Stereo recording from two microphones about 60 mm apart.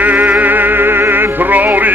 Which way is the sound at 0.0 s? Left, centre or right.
Right.